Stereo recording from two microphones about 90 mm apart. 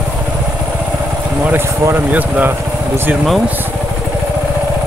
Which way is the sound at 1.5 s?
20° right (ahead or behind).